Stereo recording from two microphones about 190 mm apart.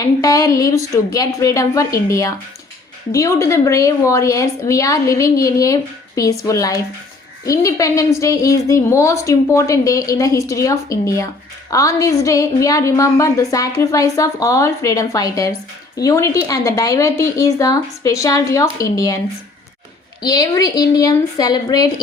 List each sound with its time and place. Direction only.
0.0 s a woman's voice: 20° left (ahead or behind)
20.2 s a woman's voice: 20° left (ahead or behind)